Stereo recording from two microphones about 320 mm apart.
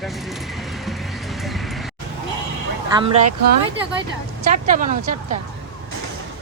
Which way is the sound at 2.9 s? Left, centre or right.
Centre.